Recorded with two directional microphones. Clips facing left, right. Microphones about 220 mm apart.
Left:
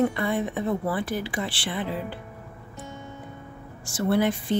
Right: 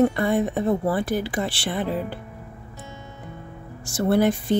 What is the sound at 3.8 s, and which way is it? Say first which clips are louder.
Speech: right 3 dB; 40° right (ahead or behind).